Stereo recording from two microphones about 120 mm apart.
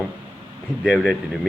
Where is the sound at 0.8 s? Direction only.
5° right (ahead or behind).